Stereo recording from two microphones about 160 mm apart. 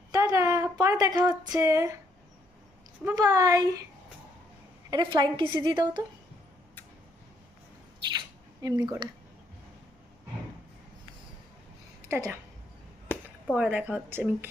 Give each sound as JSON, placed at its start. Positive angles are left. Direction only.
{"t": 0.1, "sound": "a sound", "side_deg": -20}
{"t": 3.2, "sound": "a woman's voice", "side_deg": -20}
{"t": 4.9, "sound": "a woman's voice", "side_deg": -30}
{"t": 8.6, "sound": "a woman's voice", "side_deg": -25}
{"t": 12.0, "sound": "a woman's voice", "side_deg": -15}
{"t": 13.1, "sound": "a sound", "side_deg": 15}
{"t": 13.5, "sound": "a woman's voice", "side_deg": -10}